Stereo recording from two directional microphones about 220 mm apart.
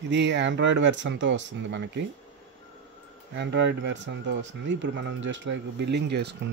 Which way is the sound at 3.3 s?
50° right (ahead or behind).